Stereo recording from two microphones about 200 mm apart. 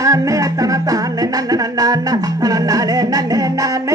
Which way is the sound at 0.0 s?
15° right (ahead or behind).